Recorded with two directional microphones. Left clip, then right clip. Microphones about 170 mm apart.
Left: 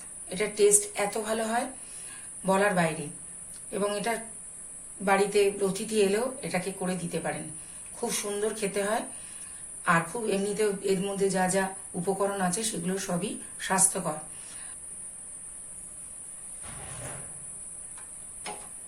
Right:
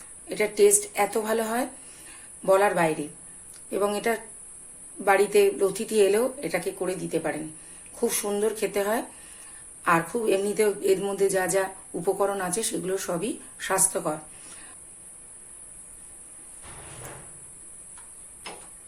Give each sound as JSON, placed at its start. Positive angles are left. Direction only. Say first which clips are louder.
{"t": 0.3, "sound": "speech", "louder": "right 3 dB", "side_deg": -45}
{"t": 9.8, "sound": "speech", "louder": "right 3 dB", "side_deg": -45}